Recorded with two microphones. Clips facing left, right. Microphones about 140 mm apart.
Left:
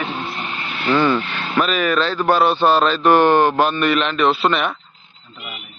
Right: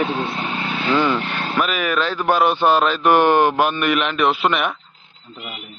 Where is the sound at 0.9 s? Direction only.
15° right (ahead or behind).